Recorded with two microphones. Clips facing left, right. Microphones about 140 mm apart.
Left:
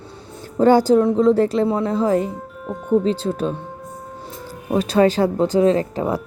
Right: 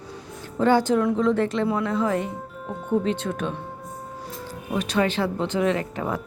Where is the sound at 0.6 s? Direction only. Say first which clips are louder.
Left 6 dB; 40° left (ahead or behind).